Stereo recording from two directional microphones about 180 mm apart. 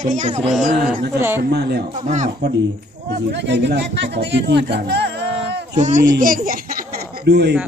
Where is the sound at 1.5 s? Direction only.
65° right (ahead or behind).